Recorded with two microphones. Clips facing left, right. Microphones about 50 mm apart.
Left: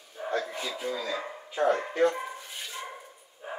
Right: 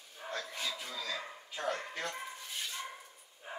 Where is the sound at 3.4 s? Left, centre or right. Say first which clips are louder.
Left 7 dB; centre.